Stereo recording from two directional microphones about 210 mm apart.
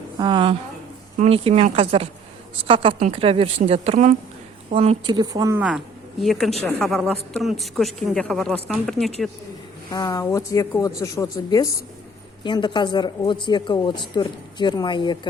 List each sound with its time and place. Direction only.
0.2 s a woman's voice: 20° right (ahead or behind); by 9.1 s centre (ahead or behind)
9.9 s speech: 15° left (ahead or behind)